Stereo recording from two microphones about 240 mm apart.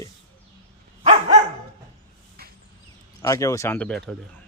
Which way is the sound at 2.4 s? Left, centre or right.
Right.